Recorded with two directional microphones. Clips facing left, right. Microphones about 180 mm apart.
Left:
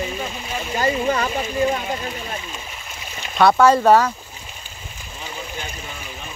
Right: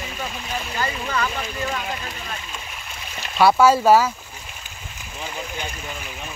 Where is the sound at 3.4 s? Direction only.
5° right (ahead or behind).